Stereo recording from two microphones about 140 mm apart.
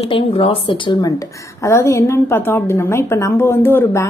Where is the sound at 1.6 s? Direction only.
20° left (ahead or behind).